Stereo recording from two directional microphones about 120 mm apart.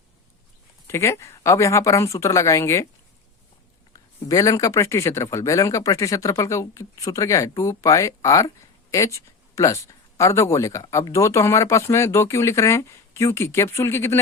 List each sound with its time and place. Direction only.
0.9 s speech: 20° left (ahead or behind)
3.9 s speech: 30° left (ahead or behind)